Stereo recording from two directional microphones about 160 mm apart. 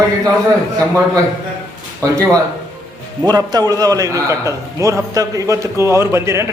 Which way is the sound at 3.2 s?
25° right (ahead or behind).